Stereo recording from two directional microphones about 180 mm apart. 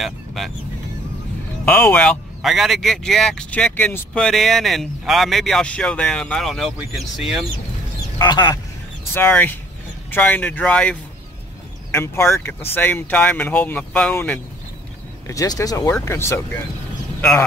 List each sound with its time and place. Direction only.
0.0 s speech: centre (ahead or behind)
1.7 s speech: 10° left (ahead or behind)
8.2 s speech: 25° left (ahead or behind)
9.1 s speech: 10° left (ahead or behind)
15.2 s a man's voice: 20° left (ahead or behind)